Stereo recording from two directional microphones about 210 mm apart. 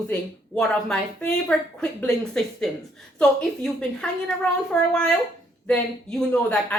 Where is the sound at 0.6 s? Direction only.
5° left (ahead or behind).